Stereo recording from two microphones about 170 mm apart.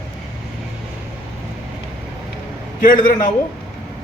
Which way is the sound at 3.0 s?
50° left (ahead or behind).